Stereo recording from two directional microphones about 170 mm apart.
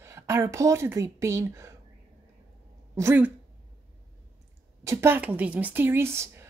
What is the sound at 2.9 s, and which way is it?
Speech, 10° right (ahead or behind).